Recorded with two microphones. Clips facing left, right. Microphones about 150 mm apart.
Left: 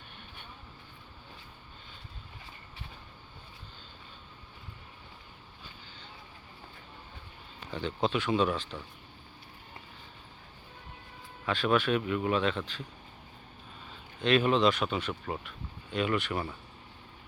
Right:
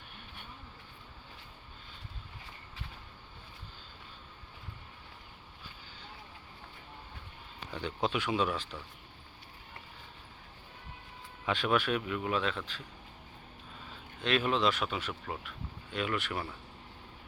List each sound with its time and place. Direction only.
7.7 s speech: 10° right (ahead or behind)
11.4 s speech: 15° right (ahead or behind)
11.7 s speech: 5° right (ahead or behind)
14.2 s speech: centre (ahead or behind)